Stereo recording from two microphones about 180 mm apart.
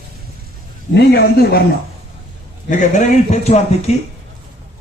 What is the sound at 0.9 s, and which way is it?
Speech, 65° left (ahead or behind).